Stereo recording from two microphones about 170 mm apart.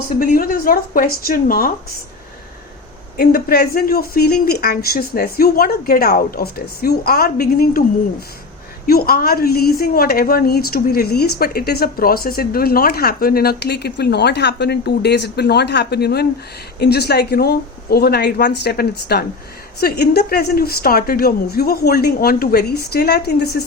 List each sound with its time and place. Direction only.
0.2 s a woman's voice: 55° left (ahead or behind)
3.2 s a woman's voice: 65° left (ahead or behind)
8.9 s a woman's voice: 60° left (ahead or behind)